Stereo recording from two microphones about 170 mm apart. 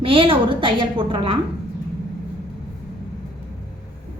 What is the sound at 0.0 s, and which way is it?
A woman's voice, 30° right (ahead or behind).